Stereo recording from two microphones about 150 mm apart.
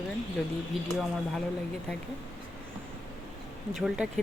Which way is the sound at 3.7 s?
Centre (ahead or behind).